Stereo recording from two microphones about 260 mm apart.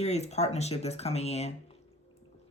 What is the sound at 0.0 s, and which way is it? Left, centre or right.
Speech, left.